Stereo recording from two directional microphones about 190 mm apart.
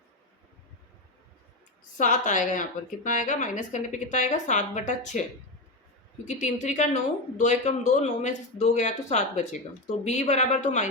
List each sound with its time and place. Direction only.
2.0 s speech: 40° left (ahead or behind)
6.2 s speech: 35° left (ahead or behind)